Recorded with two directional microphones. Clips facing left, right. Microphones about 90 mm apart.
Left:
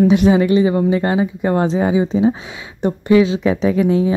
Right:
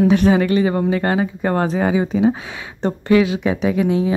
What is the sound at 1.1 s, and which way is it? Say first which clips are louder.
Speech: left 2 dB; 45° right (ahead or behind).